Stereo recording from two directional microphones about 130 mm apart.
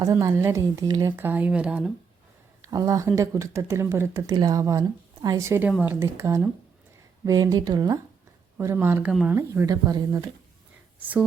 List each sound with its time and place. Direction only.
0.0 s speech: 25° right (ahead or behind)
1.1 s speech: 15° right (ahead or behind)
2.6 s speech: 30° right (ahead or behind)
8.5 s speech: 15° right (ahead or behind)